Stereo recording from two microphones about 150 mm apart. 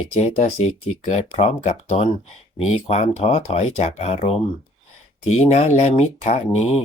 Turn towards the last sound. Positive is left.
turn(degrees=45)  # may be behind; listen again after turning